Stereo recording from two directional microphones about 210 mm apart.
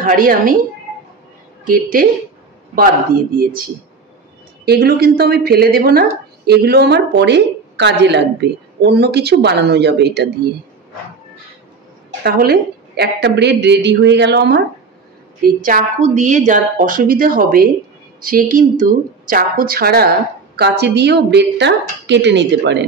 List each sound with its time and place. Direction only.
0.0 s speech: 40° right (ahead or behind)
1.7 s speech: 40° right (ahead or behind)
3.3 s a woman's voice: 45° right (ahead or behind)
12.2 s a woman's voice: 45° right (ahead or behind)
15.4 s a woman's voice: 40° right (ahead or behind); by 22.8 s 55° right (ahead or behind)